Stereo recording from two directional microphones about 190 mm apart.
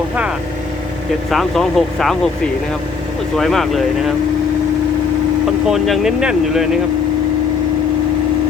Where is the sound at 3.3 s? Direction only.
Centre (ahead or behind).